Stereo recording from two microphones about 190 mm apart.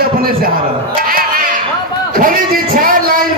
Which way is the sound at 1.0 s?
50° right (ahead or behind).